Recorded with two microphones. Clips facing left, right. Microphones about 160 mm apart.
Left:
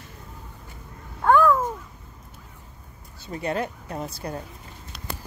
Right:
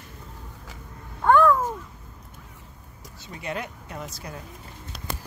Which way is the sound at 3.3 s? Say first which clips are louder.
Left 6 dB; 35° left (ahead or behind).